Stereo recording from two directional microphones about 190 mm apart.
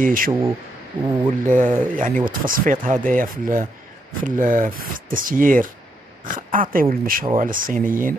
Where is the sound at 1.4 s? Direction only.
45° right (ahead or behind).